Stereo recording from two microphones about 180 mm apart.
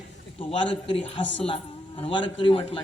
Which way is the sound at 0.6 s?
30° left (ahead or behind).